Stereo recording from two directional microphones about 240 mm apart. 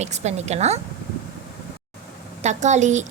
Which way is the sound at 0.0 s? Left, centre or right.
Right.